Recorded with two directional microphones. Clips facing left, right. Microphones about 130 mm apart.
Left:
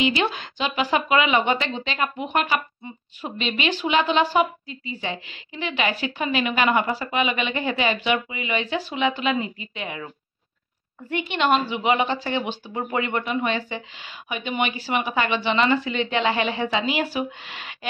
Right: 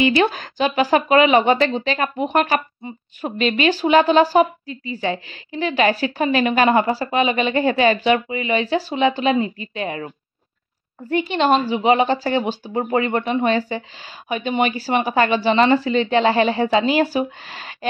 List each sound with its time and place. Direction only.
0.1 s speech: 45° right (ahead or behind)